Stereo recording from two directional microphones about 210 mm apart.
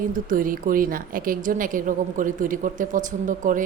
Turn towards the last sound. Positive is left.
turn(degrees=-40)  # may be behind; listen again after turning